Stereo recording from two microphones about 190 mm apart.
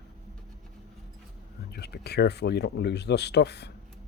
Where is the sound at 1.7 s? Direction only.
60° left (ahead or behind).